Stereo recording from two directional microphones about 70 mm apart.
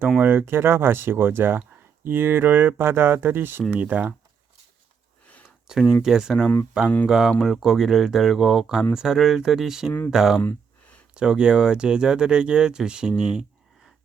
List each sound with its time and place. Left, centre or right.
0.2 s speech: right
5.9 s speech: centre